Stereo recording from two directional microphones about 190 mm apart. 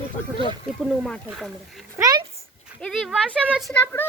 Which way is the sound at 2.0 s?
20° right (ahead or behind).